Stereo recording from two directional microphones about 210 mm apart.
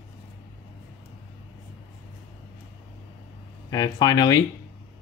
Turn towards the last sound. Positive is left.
turn(degrees=20)  # may be behind; listen again after turning